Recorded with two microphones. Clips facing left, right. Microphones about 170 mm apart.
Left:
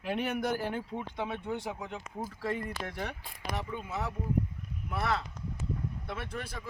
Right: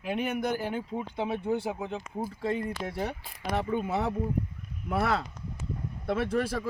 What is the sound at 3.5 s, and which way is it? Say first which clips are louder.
A man's voice: right 8 dB; 60° right (ahead or behind).